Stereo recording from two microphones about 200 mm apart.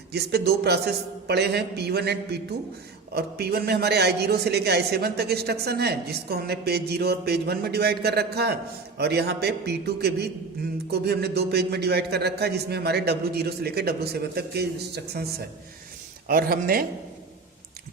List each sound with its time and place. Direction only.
0.1 s a man's voice: 55° right (ahead or behind)